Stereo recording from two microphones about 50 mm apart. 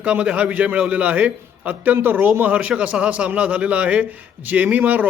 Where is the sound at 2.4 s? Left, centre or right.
Right.